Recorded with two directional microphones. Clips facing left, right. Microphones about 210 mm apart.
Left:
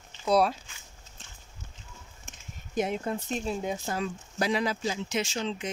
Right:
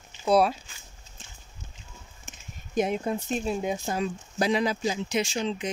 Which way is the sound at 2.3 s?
5° right (ahead or behind).